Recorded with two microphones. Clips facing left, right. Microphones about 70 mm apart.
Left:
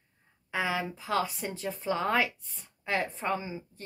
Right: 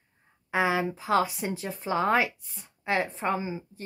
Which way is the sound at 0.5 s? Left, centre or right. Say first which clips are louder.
Right 5 dB; centre.